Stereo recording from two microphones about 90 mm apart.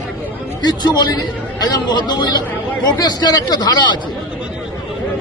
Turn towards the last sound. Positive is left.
turn(degrees=55)  # may be behind; listen again after turning